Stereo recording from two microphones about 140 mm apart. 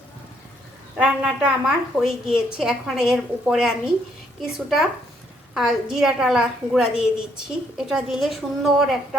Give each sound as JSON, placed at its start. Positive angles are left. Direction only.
{"t": 0.9, "sound": "a woman's voice", "side_deg": -10}